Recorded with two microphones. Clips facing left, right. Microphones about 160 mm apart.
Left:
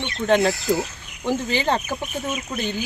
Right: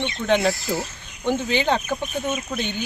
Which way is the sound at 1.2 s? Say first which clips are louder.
Right 1 dB; centre (ahead or behind).